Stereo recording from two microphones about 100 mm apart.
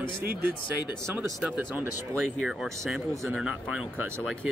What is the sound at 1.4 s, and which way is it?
Speech, 10° right (ahead or behind).